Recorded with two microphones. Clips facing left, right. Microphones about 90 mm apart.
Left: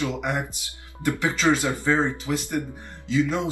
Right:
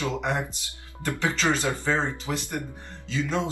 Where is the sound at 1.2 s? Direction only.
15° left (ahead or behind).